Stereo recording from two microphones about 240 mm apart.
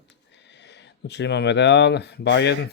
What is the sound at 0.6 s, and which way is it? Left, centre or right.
Speech, left.